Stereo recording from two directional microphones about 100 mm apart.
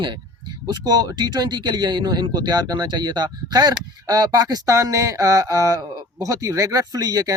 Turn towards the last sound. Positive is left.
turn(degrees=-40)  # may be behind; listen again after turning